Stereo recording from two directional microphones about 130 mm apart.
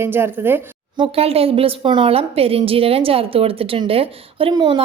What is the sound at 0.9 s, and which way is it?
A woman's voice, 45° right (ahead or behind).